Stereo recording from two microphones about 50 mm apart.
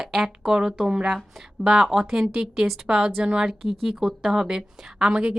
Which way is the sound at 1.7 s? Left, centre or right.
Centre.